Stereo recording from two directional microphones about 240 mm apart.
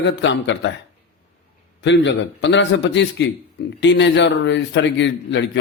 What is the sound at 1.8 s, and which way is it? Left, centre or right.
A man's voice, left.